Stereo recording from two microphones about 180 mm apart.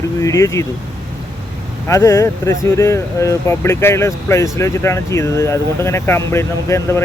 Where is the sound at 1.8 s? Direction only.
15° left (ahead or behind).